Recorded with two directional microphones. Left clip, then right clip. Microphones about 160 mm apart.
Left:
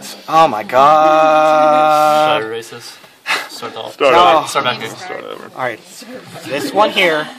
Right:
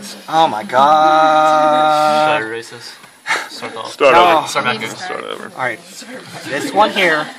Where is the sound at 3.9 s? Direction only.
5° left (ahead or behind).